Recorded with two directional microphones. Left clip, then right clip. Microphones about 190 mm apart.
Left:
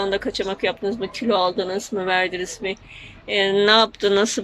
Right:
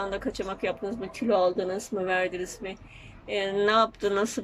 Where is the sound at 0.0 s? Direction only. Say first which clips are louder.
Left 8 dB; centre (ahead or behind).